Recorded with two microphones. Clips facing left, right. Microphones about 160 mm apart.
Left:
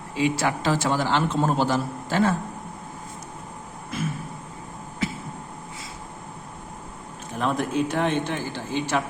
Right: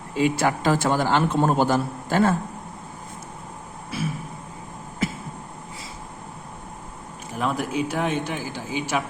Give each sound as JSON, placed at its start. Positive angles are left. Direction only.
{"t": 0.2, "sound": "a man's voice", "side_deg": -45}
{"t": 7.3, "sound": "a man's voice", "side_deg": -5}